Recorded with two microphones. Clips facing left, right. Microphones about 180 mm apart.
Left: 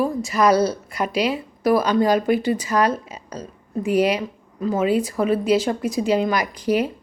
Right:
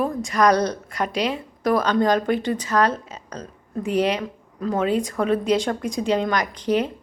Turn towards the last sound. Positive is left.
turn(degrees=10)  # may be behind; listen again after turning